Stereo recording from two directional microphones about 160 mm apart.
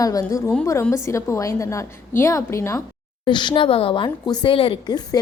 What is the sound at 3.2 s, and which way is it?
A woman's voice, 30° left (ahead or behind).